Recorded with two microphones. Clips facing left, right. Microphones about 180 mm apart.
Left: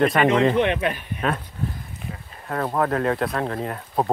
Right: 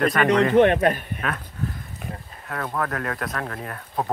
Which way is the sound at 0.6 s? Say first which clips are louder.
Right 5 dB; 45° right (ahead or behind).